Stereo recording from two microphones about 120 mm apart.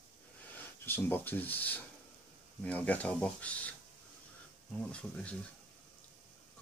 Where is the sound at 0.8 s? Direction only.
15° left (ahead or behind).